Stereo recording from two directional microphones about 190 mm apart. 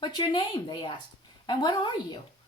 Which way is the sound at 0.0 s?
25° left (ahead or behind).